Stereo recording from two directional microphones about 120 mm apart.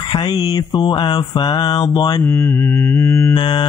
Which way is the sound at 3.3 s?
40° left (ahead or behind).